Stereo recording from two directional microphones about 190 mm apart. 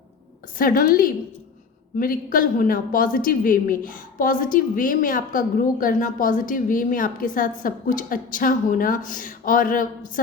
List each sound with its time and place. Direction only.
0.6 s a woman's voice: 50° left (ahead or behind)